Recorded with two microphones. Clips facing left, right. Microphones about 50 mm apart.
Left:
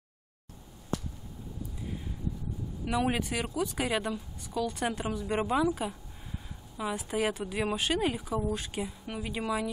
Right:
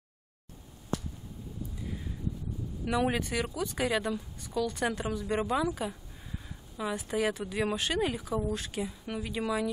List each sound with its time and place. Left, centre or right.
2.8 s a woman's voice: centre